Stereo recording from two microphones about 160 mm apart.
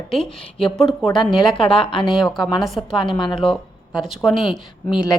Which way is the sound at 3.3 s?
5° left (ahead or behind).